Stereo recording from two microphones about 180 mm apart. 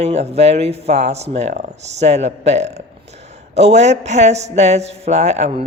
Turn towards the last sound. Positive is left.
turn(degrees=-40)  # may be behind; listen again after turning